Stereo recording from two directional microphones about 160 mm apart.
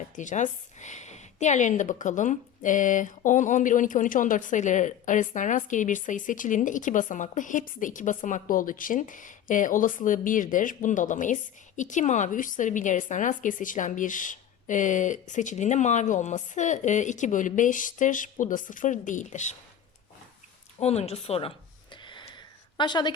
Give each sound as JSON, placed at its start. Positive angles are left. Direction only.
{"t": 0.2, "sound": "a woman's voice", "side_deg": 50}
{"t": 20.7, "sound": "a woman's voice", "side_deg": 40}
{"t": 21.9, "sound": "a sound", "side_deg": 30}